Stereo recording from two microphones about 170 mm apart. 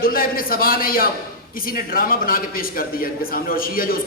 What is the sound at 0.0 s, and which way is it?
A man's voice, 60° left (ahead or behind).